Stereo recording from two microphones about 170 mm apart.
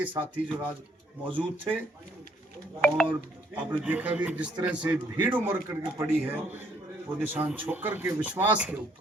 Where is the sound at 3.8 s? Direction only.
10° right (ahead or behind).